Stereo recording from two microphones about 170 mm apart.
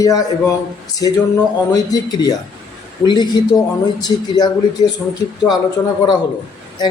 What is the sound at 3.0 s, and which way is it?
Speech, 25° left (ahead or behind).